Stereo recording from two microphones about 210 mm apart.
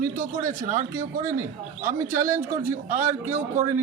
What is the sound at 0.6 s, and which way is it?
Speech, 35° right (ahead or behind).